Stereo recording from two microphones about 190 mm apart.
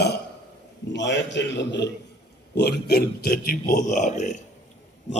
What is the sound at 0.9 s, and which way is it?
A man's voice, 70° left (ahead or behind).